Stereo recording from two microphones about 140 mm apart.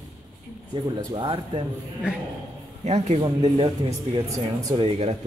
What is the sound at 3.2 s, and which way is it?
Speech, 35° right (ahead or behind).